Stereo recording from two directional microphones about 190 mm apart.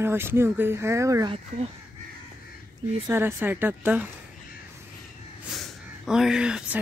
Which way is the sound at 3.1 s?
10° right (ahead or behind).